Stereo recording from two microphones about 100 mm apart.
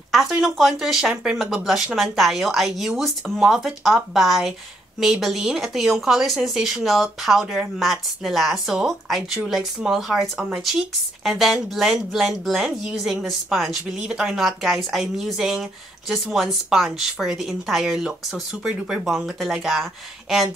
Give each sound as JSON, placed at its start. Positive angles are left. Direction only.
{"t": 0.1, "sound": "speech", "side_deg": 0}
{"t": 10.3, "sound": "speech", "side_deg": -15}
{"t": 10.6, "sound": "speech", "side_deg": -5}